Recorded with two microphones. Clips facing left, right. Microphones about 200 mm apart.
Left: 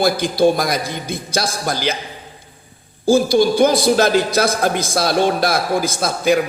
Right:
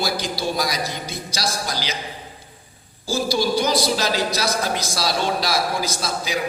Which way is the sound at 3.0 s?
55° left (ahead or behind).